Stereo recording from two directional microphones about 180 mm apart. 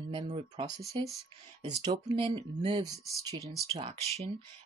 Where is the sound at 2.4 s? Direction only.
25° right (ahead or behind).